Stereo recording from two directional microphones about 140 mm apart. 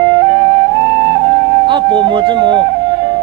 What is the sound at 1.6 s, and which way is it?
Speech, 35° right (ahead or behind).